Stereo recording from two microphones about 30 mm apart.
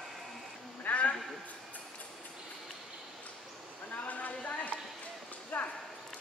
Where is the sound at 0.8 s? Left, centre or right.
Left.